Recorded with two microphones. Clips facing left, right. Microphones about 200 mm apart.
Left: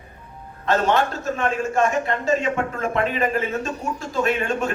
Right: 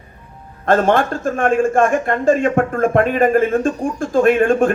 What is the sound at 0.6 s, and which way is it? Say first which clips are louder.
A man's voice: right 5 dB; 50° right (ahead or behind).